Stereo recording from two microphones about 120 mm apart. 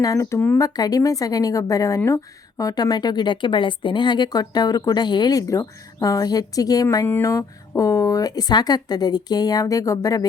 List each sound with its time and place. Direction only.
0.0 s a woman's voice: 25° left (ahead or behind)
0.6 s a woman's voice: 30° left (ahead or behind)